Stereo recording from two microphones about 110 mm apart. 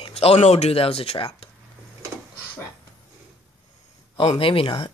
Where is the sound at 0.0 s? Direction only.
65° left (ahead or behind).